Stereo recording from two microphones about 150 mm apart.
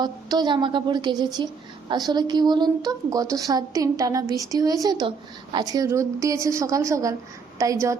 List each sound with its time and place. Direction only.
0.0 s a woman's voice: 30° right (ahead or behind)